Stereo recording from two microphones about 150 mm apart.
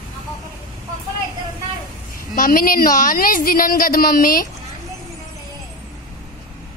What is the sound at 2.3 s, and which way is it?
A woman's voice, 65° left (ahead or behind).